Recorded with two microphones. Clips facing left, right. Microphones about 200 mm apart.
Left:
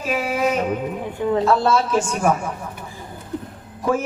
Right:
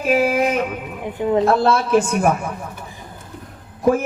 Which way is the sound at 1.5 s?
55° right (ahead or behind).